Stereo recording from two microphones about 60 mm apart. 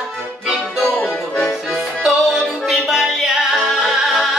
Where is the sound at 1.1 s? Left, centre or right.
Centre.